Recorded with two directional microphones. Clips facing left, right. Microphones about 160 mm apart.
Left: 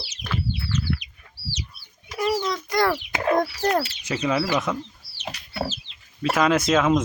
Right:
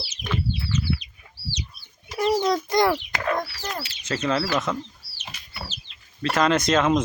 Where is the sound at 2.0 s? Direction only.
25° right (ahead or behind).